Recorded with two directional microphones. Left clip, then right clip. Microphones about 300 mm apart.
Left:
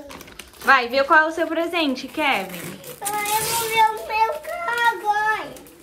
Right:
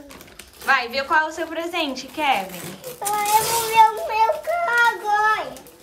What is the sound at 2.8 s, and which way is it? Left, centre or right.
Child singing, centre.